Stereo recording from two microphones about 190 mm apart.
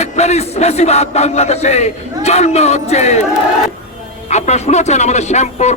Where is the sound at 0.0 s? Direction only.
35° left (ahead or behind).